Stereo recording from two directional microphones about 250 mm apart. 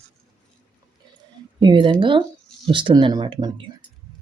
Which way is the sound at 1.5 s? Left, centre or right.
Centre.